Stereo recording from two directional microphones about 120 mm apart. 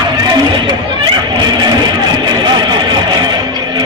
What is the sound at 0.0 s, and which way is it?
Music, 35° right (ahead or behind).